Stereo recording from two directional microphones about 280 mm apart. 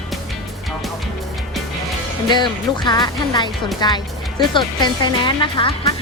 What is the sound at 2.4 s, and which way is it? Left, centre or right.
Speech, centre.